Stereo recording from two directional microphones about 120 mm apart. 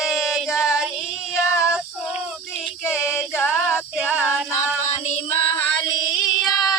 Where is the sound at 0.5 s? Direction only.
Centre (ahead or behind).